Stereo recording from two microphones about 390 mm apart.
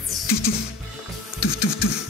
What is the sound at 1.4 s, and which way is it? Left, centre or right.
Printer, left.